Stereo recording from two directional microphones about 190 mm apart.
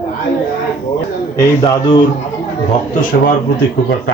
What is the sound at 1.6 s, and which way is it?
Speech, 20° left (ahead or behind).